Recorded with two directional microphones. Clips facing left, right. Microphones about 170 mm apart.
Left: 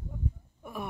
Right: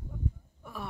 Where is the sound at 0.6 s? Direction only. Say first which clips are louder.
Left 3 dB; 15° left (ahead or behind).